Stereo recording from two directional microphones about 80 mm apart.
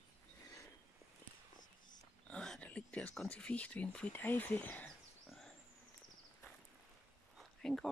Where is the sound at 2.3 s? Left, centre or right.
Centre.